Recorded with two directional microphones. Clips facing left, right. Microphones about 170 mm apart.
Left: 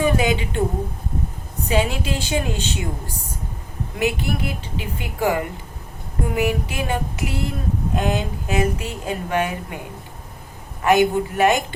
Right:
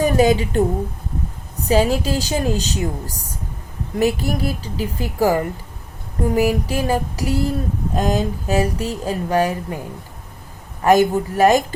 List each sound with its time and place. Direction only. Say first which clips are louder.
0.0 s speech: right 4 dB; 40° right (ahead or behind)
1.6 s speech: right 5 dB; 40° right (ahead or behind)
3.9 s speech: right 4 dB; 40° right (ahead or behind)
10.8 s speech: right 2 dB; 35° right (ahead or behind)